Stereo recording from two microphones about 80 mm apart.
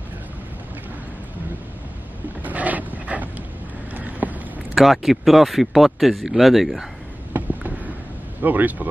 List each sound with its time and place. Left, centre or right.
2.4 s dog: centre
3.9 s boat: right
4.7 s speech: centre
7.3 s a sound: right
8.4 s speech: right